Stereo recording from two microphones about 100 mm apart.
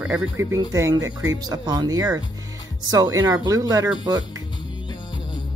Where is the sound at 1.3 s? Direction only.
40° right (ahead or behind).